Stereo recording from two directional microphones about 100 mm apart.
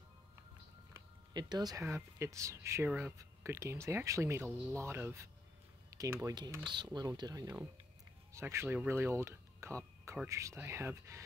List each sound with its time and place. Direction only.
1.3 s speech: 45° right (ahead or behind)
1.8 s speech: 25° right (ahead or behind)
2.9 s speech: 10° right (ahead or behind)
3.4 s speech: 30° right (ahead or behind)
6.6 s speech: 50° right (ahead or behind); by 11.2 s 30° right (ahead or behind)